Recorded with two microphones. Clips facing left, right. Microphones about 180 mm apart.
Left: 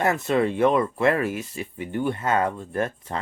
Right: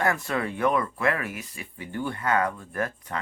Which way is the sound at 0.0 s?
20° left (ahead or behind).